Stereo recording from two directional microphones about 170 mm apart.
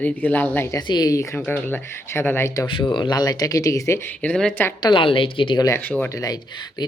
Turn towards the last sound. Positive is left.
turn(degrees=25)  # may be behind; listen again after turning